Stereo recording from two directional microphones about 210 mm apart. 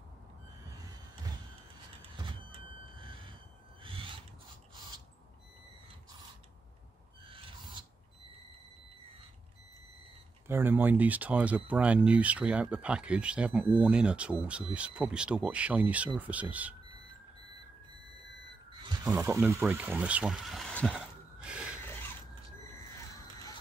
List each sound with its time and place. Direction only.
2.1 s vehicle: 25° right (ahead or behind)
3.8 s filing: 25° right (ahead or behind)
7.2 s owl: 25° right (ahead or behind)
10.4 s speech: 10° right (ahead or behind)
19.0 s speech: 15° right (ahead or behind)